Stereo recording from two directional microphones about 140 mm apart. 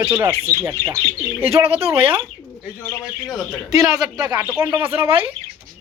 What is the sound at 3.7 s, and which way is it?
Speech, 25° right (ahead or behind).